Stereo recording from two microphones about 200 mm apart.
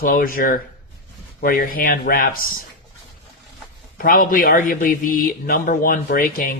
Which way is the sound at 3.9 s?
45° left (ahead or behind).